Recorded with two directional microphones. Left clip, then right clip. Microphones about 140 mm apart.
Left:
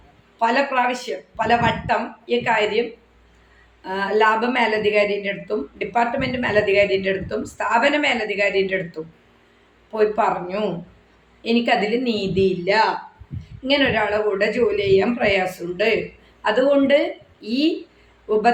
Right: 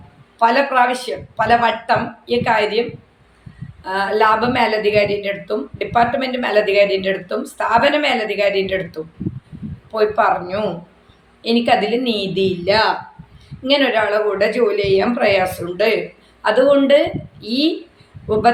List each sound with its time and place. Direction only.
0.3 s speech: centre (ahead or behind)
3.8 s speech: 5° left (ahead or behind)